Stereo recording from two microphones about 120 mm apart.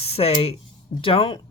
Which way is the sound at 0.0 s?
55° left (ahead or behind).